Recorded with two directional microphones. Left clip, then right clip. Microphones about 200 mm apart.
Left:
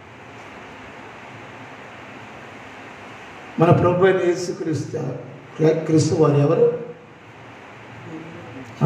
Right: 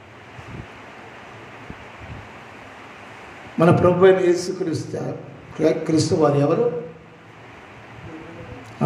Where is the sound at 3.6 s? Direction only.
60° right (ahead or behind).